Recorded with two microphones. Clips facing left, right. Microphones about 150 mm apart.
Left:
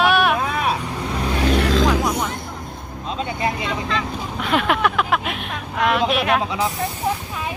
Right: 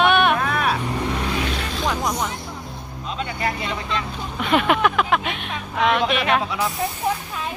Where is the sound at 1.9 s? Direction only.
5° left (ahead or behind).